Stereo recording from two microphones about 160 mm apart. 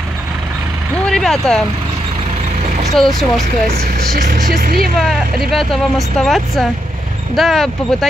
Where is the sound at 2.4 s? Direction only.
45° right (ahead or behind).